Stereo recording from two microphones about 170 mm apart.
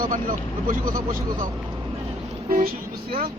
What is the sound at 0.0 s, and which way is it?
Speech, 55° right (ahead or behind).